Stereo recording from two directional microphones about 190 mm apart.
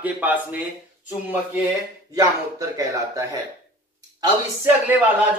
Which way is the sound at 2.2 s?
20° right (ahead or behind).